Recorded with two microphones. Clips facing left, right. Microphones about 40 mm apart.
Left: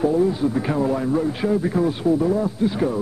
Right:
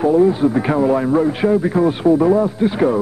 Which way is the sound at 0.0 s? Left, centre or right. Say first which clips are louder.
Right 6 dB; right.